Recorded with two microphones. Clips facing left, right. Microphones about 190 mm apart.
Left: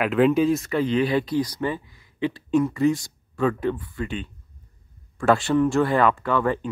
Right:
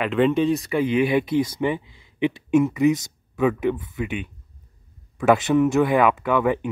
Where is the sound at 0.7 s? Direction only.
15° right (ahead or behind).